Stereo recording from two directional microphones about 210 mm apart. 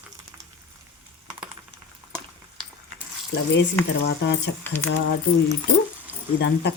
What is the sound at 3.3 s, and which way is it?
Speech, 55° left (ahead or behind).